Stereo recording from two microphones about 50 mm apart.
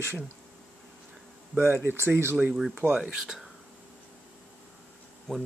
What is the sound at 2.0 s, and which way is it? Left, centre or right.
Speech, right.